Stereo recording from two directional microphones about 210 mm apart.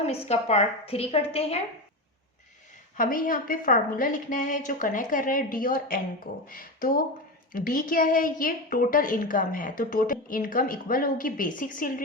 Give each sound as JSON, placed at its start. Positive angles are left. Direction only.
{"t": 0.3, "sound": "a woman's voice", "side_deg": 30}
{"t": 3.0, "sound": "a woman's voice", "side_deg": 40}